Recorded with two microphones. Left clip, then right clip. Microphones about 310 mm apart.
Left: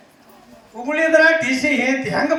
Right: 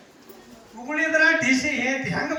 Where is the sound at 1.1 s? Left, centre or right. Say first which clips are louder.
Left 5 dB; left.